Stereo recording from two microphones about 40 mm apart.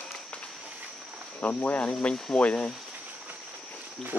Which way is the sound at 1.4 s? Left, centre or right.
Left.